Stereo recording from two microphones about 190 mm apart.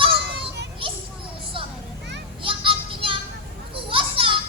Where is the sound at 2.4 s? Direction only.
30° right (ahead or behind).